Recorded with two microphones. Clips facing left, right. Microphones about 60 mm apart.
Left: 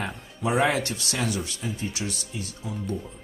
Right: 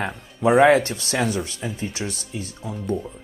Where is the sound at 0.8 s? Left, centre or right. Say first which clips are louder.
Right 5 dB; right.